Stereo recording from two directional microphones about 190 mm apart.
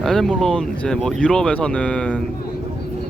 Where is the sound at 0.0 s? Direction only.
Centre (ahead or behind).